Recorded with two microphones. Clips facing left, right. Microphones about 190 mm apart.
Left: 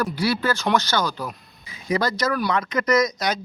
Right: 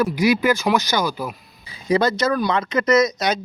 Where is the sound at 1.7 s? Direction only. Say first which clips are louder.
Right 5 dB; 30° right (ahead or behind).